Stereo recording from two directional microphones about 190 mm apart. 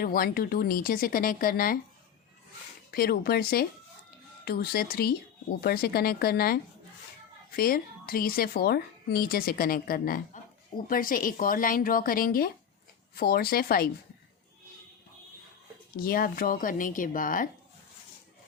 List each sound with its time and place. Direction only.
0.0 s a woman's voice: 50° left (ahead or behind)
2.9 s a woman's voice: 55° left (ahead or behind)
16.0 s a woman's voice: 50° left (ahead or behind)